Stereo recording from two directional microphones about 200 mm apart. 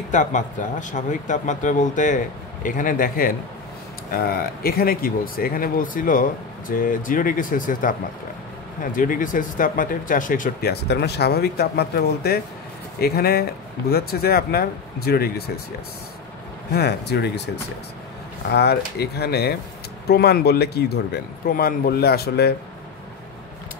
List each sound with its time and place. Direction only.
0.1 s speech: 40° left (ahead or behind)
8.9 s speech: 40° left (ahead or behind)
16.7 s speech: 55° left (ahead or behind)
18.5 s speech: 55° left (ahead or behind)